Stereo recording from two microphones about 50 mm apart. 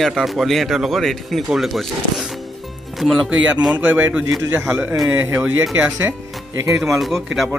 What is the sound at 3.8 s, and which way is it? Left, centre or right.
Speech, right.